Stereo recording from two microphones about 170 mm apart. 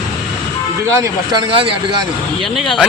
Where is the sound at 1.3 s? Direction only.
30° right (ahead or behind).